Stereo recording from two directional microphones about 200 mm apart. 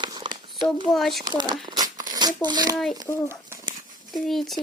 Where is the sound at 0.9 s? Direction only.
Centre (ahead or behind).